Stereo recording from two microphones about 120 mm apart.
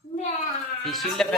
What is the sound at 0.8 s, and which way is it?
Speech, centre (ahead or behind).